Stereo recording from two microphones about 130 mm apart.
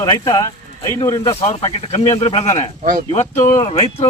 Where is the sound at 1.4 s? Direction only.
50° left (ahead or behind).